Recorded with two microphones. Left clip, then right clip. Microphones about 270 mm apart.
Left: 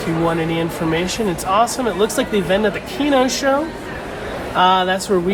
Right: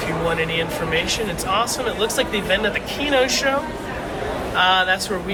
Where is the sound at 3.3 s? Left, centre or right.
Centre.